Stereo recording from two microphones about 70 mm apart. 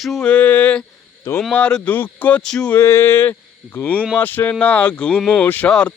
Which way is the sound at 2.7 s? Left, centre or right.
Left.